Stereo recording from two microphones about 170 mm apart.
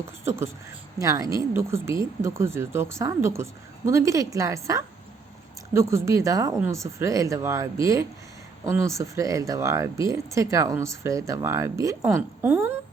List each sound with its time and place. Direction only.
0.3 s speech: 15° right (ahead or behind)